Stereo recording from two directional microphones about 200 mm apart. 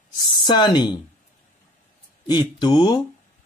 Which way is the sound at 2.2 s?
20° left (ahead or behind).